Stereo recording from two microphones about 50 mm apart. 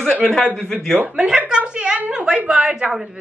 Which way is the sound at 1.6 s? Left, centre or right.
Right.